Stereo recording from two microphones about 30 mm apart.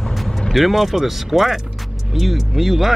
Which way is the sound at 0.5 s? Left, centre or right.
Centre.